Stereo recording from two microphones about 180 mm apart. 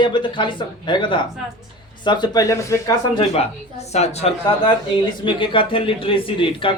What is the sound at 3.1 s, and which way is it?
A woman's voice, 35° left (ahead or behind).